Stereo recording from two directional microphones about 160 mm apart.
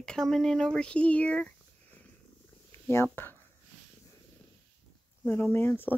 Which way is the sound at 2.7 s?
15° left (ahead or behind).